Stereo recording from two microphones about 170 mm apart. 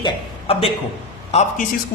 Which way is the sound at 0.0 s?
35° left (ahead or behind).